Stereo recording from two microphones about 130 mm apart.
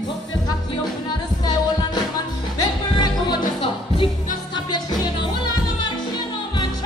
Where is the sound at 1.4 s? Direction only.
30° left (ahead or behind).